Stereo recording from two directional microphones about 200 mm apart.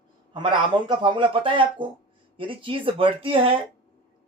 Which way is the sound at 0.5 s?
25° right (ahead or behind).